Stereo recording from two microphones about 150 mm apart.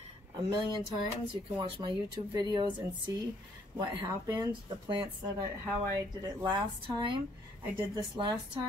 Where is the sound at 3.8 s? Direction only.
25° right (ahead or behind).